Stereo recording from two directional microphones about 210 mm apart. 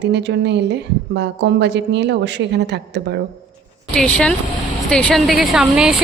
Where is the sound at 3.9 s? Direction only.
5° left (ahead or behind).